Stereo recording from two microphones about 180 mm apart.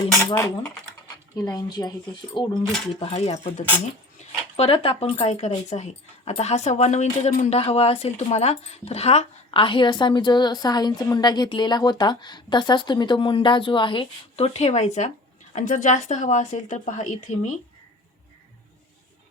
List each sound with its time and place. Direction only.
0.2 s cutlery: 20° left (ahead or behind)
1.4 s speech: 20° left (ahead or behind)
2.7 s speech: centre (ahead or behind)
3.0 s speech: 35° left (ahead or behind)
4.2 s dog: 40° left (ahead or behind)
4.5 s a woman's voice: 30° left (ahead or behind)